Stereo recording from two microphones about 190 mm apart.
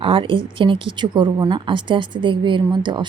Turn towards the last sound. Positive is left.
turn(degrees=-25)  # may be behind; listen again after turning